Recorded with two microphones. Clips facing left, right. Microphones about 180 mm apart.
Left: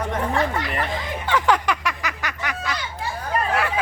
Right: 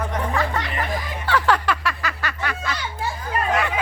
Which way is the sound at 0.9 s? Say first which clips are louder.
Right 2 dB; 20° left (ahead or behind).